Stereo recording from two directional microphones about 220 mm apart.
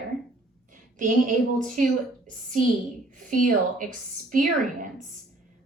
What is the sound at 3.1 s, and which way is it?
A woman's voice, 35° right (ahead or behind).